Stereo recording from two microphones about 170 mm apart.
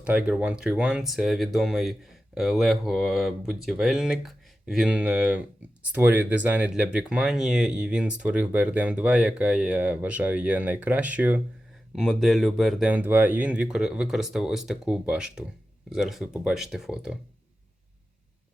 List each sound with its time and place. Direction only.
0.0 s speech: 5° right (ahead or behind)